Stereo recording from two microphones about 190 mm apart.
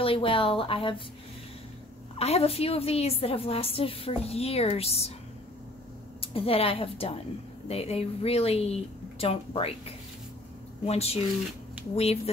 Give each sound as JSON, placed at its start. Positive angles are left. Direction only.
{"t": 0.0, "sound": "speech", "side_deg": 30}
{"t": 2.1, "sound": "a woman's voice", "side_deg": 35}
{"t": 6.2, "sound": "a woman's voice", "side_deg": 30}